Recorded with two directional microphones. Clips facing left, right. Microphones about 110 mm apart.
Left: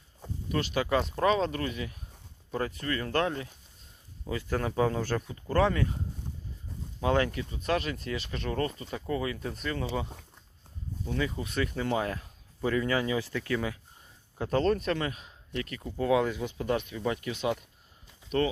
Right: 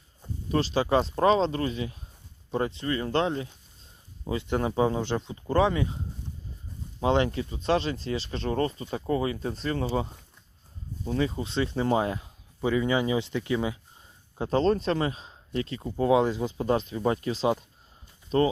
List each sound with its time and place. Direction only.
0.4 s speech: 30° right (ahead or behind)
7.0 s speech: 25° right (ahead or behind)